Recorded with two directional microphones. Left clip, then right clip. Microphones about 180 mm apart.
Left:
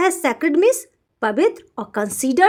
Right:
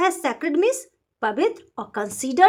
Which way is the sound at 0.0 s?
30° left (ahead or behind).